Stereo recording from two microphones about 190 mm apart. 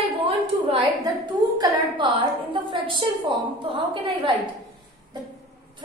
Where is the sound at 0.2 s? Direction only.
30° right (ahead or behind).